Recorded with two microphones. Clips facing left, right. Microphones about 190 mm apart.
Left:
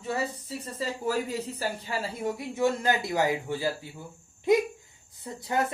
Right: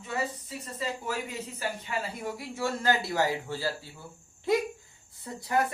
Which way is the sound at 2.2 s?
20° left (ahead or behind).